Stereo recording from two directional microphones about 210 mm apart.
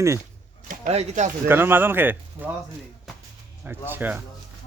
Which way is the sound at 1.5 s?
10° right (ahead or behind).